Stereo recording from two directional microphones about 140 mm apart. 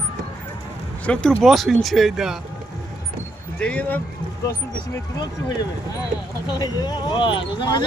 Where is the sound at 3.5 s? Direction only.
10° left (ahead or behind).